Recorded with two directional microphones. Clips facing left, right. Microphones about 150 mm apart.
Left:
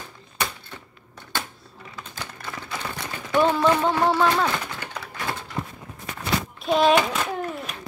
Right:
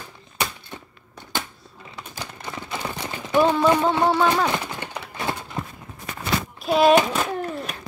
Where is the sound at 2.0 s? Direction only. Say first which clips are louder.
Right 2 dB; 15° right (ahead or behind).